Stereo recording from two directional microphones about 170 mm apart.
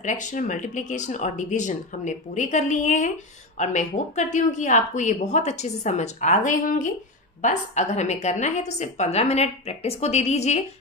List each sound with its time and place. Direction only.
0.0 s a woman's voice: 45° left (ahead or behind)